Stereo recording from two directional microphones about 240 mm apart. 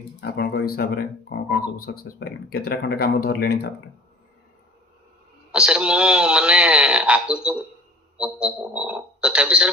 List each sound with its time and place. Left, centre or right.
0.2 s speech: left
5.5 s speech: centre